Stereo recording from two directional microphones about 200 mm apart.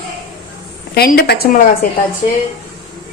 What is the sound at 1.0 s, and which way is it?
Speech, 50° left (ahead or behind).